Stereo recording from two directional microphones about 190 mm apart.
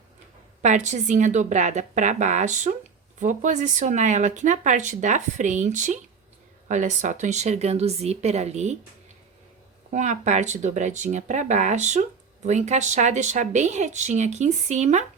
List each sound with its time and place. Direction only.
0.6 s speech: 40° right (ahead or behind)
9.9 s speech: 40° right (ahead or behind)